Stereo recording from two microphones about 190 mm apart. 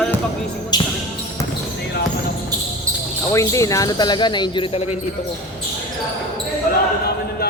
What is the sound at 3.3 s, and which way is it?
Speech, 15° left (ahead or behind).